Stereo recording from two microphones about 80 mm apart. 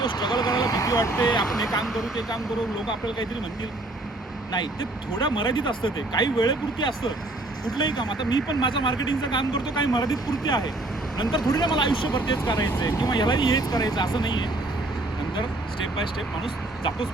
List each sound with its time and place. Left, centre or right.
0.0 s vehicle: left
1.8 s speech: centre
5.2 s speech: left